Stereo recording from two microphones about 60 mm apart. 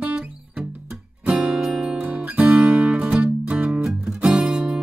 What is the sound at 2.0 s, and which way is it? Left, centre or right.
Music, right.